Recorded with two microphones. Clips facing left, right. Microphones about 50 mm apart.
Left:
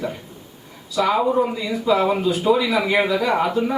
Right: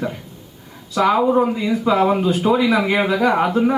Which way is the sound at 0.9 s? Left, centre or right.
Right.